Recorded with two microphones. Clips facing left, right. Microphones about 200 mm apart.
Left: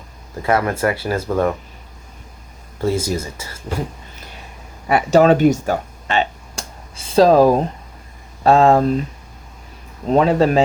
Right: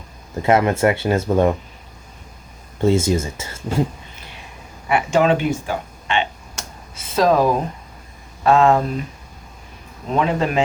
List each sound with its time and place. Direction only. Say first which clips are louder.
0.4 s speech: right 2 dB; 25° right (ahead or behind)
2.8 s speech: right 3 dB; 25° right (ahead or behind)
4.9 s a sound: left 4 dB; 40° left (ahead or behind)
8.4 s a man's voice: left 2 dB; 35° left (ahead or behind)
10.1 s a man's voice: left 5 dB; 35° left (ahead or behind)